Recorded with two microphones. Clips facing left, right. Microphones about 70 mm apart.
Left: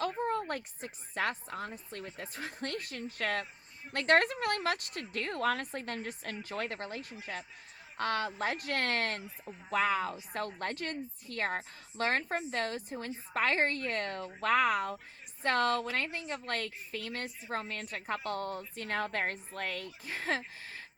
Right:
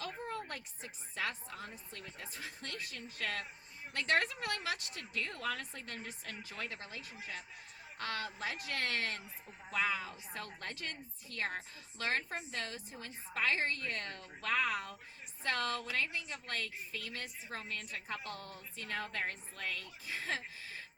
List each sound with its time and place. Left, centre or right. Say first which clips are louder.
0.0 s a woman's voice: left 9 dB; left